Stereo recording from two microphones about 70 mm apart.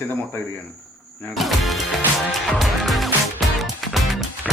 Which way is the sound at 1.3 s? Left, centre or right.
Centre.